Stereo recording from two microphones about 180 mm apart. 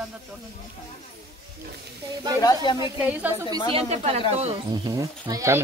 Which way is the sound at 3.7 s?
35° right (ahead or behind).